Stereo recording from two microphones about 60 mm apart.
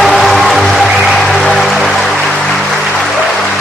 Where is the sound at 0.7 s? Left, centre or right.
Centre.